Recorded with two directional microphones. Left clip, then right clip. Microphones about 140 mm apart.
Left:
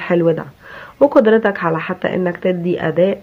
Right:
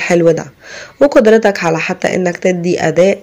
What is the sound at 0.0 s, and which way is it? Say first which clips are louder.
Speech: right 5 dB; 35° right (ahead or behind).